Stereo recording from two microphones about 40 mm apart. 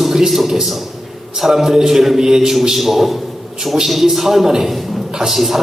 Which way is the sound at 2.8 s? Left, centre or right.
Centre.